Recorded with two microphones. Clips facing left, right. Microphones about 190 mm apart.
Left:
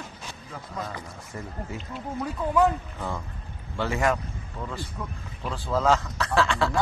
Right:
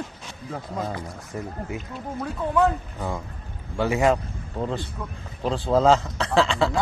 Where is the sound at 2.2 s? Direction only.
Centre (ahead or behind).